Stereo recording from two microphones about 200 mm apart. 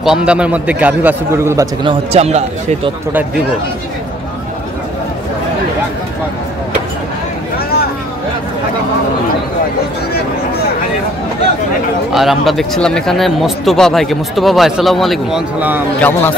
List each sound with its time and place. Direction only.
0.0 s a man's voice: 5° right (ahead or behind)
1.9 s speech: 30° right (ahead or behind)
12.1 s speech: centre (ahead or behind)
16.0 s a man's voice: 10° left (ahead or behind)